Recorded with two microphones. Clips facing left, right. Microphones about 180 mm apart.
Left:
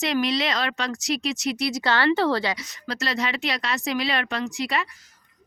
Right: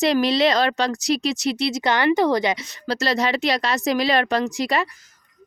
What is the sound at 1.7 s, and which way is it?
Speech, 15° right (ahead or behind).